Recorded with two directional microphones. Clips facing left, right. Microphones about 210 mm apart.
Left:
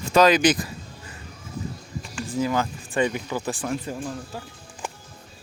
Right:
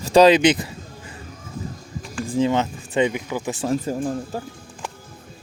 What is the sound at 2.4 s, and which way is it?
Speech, 25° right (ahead or behind).